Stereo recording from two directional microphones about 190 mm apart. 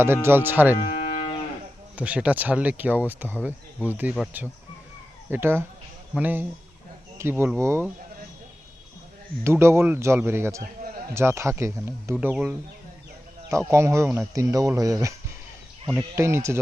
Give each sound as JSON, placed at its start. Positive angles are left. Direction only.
{"t": 0.0, "sound": "speech", "side_deg": -10}
{"t": 0.9, "sound": "cattle", "side_deg": 40}
{"t": 2.0, "sound": "speech", "side_deg": -5}
{"t": 5.3, "sound": "speech", "side_deg": -10}
{"t": 9.4, "sound": "speech", "side_deg": -15}
{"t": 16.1, "sound": "speech", "side_deg": -15}